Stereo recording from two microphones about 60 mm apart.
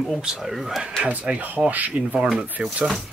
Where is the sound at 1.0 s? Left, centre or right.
Right.